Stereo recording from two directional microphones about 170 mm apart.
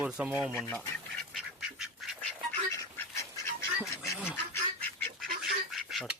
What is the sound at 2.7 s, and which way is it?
Duck, 15° left (ahead or behind).